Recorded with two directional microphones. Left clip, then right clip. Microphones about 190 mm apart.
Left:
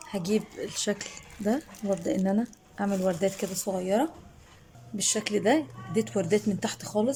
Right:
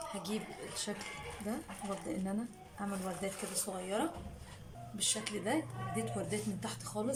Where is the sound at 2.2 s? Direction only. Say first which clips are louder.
Left 12 dB; 45° left (ahead or behind).